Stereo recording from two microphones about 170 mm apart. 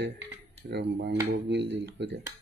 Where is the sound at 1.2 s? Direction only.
90° right.